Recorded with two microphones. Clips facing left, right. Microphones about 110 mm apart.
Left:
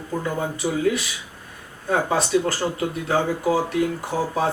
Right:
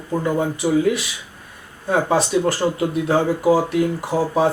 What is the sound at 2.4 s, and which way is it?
Speech, 20° right (ahead or behind).